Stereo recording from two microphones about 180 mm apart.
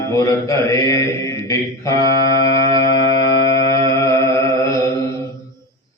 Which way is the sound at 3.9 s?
15° left (ahead or behind).